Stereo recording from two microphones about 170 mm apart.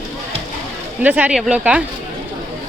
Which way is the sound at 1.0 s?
10° right (ahead or behind).